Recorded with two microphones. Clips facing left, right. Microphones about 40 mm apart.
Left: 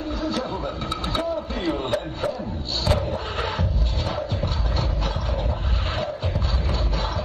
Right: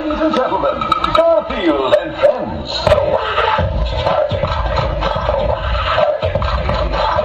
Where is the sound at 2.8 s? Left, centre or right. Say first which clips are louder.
Right 13 dB; right.